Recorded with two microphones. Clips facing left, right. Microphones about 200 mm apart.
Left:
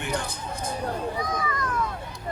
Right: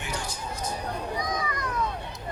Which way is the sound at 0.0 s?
55° left (ahead or behind).